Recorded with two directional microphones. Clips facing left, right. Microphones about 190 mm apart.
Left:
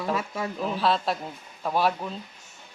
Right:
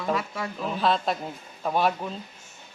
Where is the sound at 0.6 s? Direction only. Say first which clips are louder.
Right 1 dB; 5° left (ahead or behind).